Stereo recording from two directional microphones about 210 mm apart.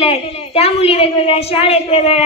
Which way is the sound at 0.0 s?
30° left (ahead or behind).